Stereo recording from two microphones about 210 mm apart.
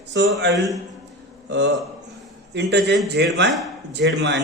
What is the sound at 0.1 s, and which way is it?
Speech, 55° right (ahead or behind).